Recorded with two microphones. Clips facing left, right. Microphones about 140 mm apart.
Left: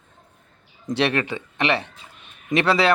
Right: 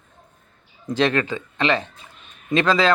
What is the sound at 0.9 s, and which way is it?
Speech, 15° left (ahead or behind).